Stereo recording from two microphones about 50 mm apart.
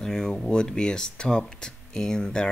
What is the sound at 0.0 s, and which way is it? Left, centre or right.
Speech, centre.